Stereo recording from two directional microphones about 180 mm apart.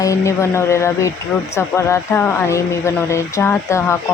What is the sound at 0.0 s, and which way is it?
Speech, 15° left (ahead or behind).